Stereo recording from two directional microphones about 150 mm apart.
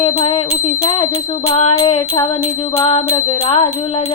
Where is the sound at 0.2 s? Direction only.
40° left (ahead or behind).